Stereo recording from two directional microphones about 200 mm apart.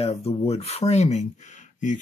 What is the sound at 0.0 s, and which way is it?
Speech, 30° left (ahead or behind).